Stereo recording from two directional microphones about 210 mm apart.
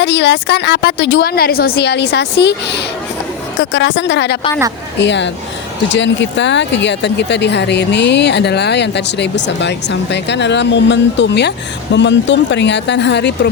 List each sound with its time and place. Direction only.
0.0 s a woman's voice: 55° left (ahead or behind)